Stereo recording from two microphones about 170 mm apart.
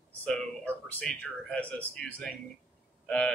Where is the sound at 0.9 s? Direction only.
10° left (ahead or behind).